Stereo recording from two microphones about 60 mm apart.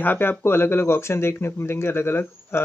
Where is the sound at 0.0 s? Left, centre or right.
Left.